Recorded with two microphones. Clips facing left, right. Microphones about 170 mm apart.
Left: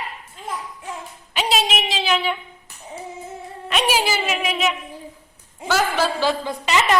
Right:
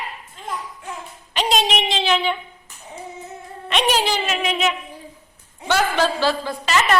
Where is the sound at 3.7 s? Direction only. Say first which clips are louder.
Right 1 dB; 5° left (ahead or behind).